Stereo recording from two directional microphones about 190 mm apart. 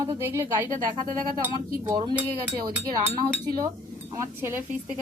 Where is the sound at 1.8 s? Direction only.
20° right (ahead or behind).